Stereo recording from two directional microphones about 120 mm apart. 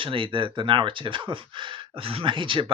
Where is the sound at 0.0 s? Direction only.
45° right (ahead or behind).